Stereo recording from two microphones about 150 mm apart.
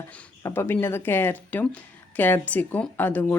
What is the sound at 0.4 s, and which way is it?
A woman's voice, 15° left (ahead or behind).